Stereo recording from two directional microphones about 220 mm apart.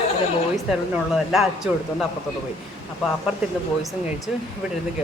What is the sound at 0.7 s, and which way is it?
Speech, centre (ahead or behind).